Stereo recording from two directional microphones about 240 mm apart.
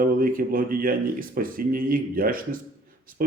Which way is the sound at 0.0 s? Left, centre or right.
Right.